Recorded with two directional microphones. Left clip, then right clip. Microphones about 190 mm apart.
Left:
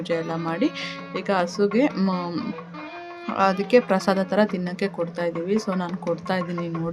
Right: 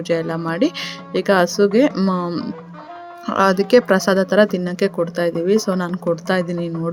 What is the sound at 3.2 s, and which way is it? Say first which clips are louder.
Speech: right 6 dB; 25° right (ahead or behind).